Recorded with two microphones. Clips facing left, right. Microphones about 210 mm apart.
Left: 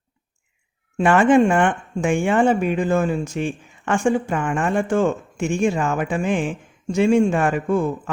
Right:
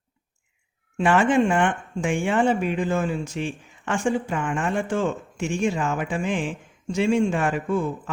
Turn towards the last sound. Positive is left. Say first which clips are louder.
# left 4 dB
turn(degrees=50)  # may be behind; listen again after turning